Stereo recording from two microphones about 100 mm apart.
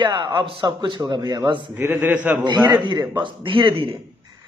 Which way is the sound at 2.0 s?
20° right (ahead or behind).